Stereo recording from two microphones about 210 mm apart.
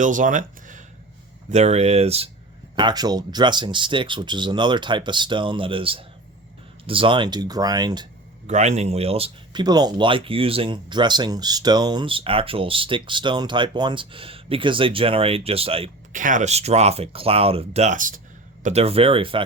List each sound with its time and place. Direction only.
0.0 s speech: 40° right (ahead or behind); by 8.0 s 20° right (ahead or behind)
8.4 s speech: 35° right (ahead or behind)